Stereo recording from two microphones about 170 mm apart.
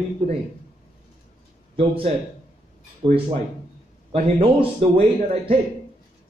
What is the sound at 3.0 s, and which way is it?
A man's voice, 30° right (ahead or behind).